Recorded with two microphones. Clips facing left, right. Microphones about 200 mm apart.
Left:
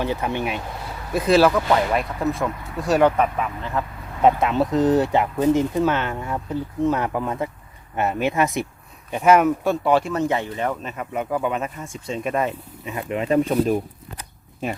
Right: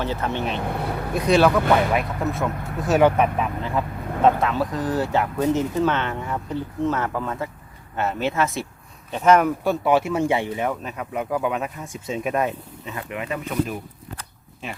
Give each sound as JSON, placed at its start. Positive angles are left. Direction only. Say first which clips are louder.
{"t": 0.0, "sound": "speech", "louder": "left 1 dB", "side_deg": 15}
{"t": 0.6, "sound": "speech", "louder": "right 7 dB", "side_deg": -60}
{"t": 1.1, "sound": "speech", "louder": "left 1 dB", "side_deg": 0}
{"t": 4.2, "sound": "speech", "louder": "left 1 dB", "side_deg": 20}
{"t": 12.8, "sound": "speech", "louder": "left 5 dB", "side_deg": 20}